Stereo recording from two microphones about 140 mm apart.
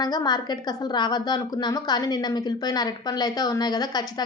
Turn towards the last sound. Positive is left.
turn(degrees=30)  # may be behind; listen again after turning